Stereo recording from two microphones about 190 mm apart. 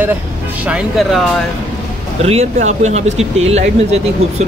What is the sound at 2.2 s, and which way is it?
Speech, 35° right (ahead or behind).